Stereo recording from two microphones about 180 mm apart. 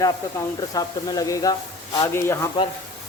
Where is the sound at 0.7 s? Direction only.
20° left (ahead or behind).